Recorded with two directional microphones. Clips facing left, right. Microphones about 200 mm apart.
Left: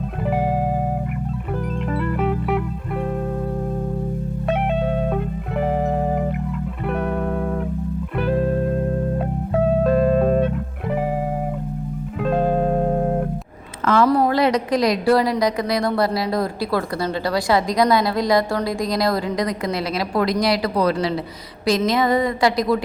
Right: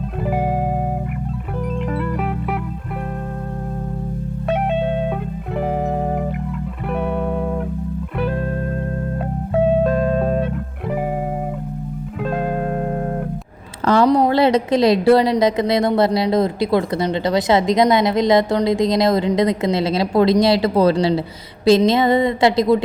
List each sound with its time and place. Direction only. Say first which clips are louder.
6.9 s music: right 2 dB; centre (ahead or behind)
10.0 s music: left 2 dB; 5° left (ahead or behind)
12.4 s music: left 4 dB; centre (ahead or behind)
14.0 s a woman's voice: right 2 dB; 20° right (ahead or behind)